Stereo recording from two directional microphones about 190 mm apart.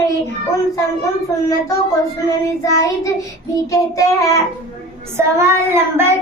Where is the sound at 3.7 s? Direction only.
15° left (ahead or behind).